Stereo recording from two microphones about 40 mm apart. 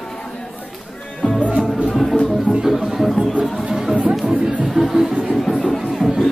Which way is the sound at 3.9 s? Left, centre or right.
Right.